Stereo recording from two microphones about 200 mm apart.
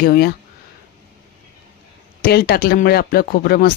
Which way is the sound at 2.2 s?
50° left (ahead or behind).